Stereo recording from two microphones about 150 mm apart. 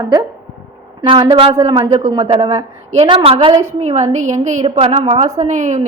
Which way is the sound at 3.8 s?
50° right (ahead or behind).